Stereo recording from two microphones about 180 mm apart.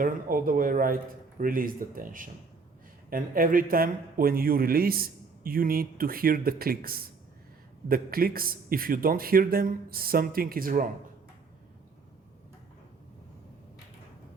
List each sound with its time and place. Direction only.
0.0 s a man's voice: 50° right (ahead or behind)